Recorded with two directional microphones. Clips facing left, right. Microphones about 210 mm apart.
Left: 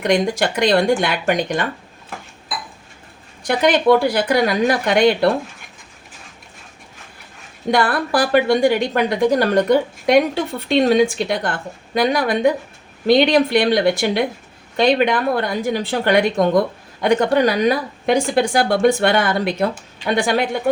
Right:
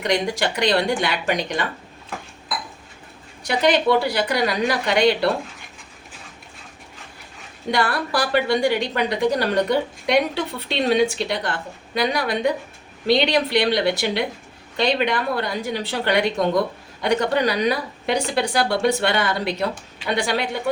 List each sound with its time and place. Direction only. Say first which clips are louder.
0.0 s speech: left 4 dB; 50° left (ahead or behind)
3.4 s speech: left 3 dB; 50° left (ahead or behind)
7.7 s speech: left 5 dB; 50° left (ahead or behind)